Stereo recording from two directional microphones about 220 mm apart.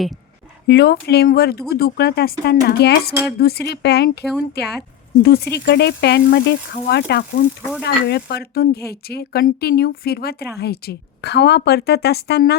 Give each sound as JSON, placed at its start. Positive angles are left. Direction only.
{"t": 0.7, "sound": "a woman's voice", "side_deg": 45}